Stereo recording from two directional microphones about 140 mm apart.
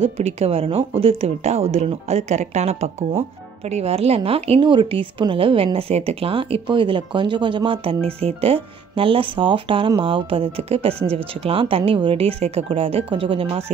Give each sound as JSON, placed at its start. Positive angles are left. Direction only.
{"t": 0.0, "sound": "speech", "side_deg": -50}